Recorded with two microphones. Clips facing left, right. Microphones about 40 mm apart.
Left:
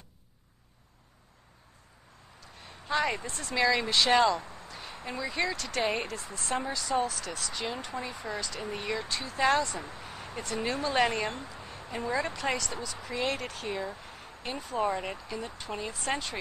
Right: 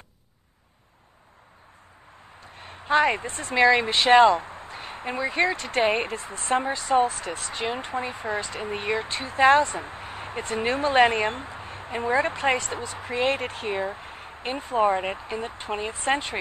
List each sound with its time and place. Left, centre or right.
2.4 s speech: right